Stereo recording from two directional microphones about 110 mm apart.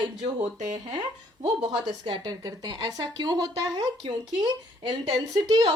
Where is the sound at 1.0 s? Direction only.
55° right (ahead or behind).